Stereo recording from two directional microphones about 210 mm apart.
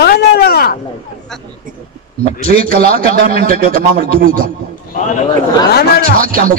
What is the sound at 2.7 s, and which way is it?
Speech, 40° right (ahead or behind).